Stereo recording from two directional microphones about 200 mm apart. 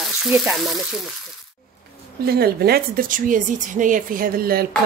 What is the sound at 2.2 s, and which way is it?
A woman's voice, 50° right (ahead or behind).